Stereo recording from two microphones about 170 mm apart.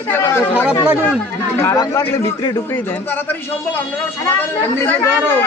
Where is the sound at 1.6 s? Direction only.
15° left (ahead or behind).